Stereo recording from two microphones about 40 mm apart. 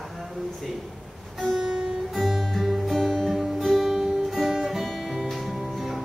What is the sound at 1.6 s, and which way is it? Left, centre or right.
Music, centre.